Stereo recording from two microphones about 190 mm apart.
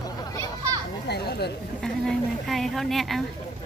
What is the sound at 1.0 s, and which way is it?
Speech, 60° left (ahead or behind).